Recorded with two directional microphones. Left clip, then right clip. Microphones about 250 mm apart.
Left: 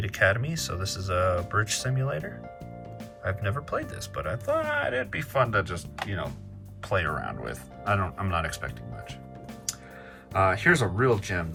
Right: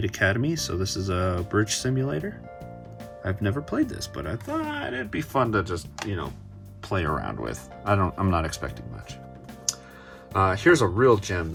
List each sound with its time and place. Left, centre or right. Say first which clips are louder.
0.0 s speech: even; centre
10.5 s speech: right 3 dB; right